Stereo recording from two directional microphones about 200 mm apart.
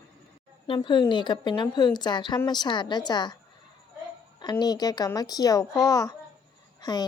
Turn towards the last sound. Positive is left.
turn(degrees=20)  # may be behind; listen again after turning